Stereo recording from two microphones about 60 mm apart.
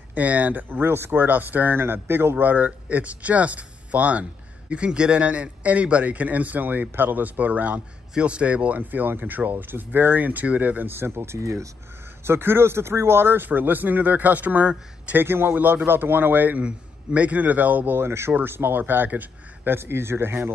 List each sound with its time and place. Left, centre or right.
0.1 s speech: right
0.7 s speech: right
12.3 s speech: right
15.1 s speech: right
17.9 s speech: right